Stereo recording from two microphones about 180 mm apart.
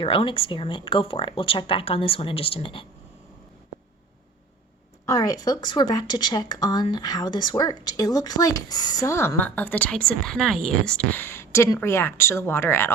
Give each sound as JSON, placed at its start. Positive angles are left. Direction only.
{"t": 0.0, "sound": "speech", "side_deg": 30}
{"t": 5.0, "sound": "speech", "side_deg": 20}